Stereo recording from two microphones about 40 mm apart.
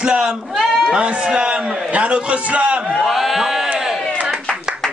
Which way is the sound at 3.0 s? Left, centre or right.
Centre.